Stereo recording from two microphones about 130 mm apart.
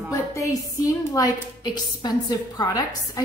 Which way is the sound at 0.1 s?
25° left (ahead or behind).